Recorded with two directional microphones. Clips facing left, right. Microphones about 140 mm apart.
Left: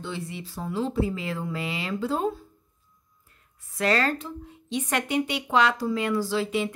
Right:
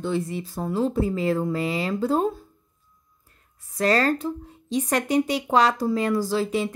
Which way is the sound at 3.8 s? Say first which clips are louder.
Right 3 dB; 40° right (ahead or behind).